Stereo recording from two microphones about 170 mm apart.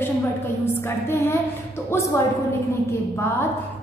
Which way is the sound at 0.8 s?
15° left (ahead or behind).